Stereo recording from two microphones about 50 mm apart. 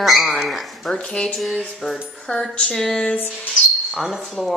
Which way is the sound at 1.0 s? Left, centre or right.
Centre.